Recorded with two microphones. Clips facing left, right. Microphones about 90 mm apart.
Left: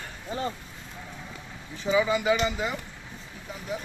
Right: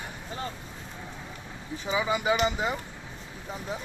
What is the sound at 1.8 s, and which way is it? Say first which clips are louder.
Speech: left 4 dB; 20° right (ahead or behind).